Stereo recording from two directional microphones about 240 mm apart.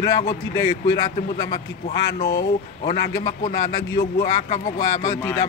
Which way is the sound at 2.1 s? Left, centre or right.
Left.